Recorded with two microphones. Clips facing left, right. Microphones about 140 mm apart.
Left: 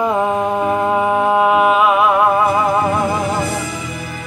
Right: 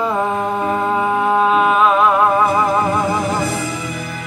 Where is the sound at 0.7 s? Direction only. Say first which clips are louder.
Left 1 dB; 10° left (ahead or behind).